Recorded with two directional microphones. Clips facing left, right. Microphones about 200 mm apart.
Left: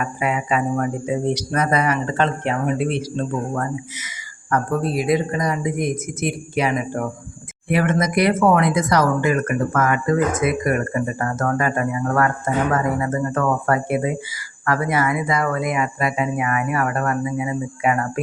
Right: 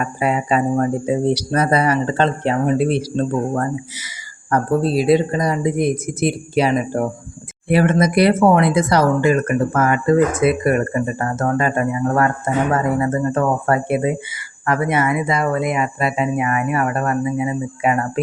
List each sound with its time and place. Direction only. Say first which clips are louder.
0.0 s speech: right 3 dB; 35° right (ahead or behind)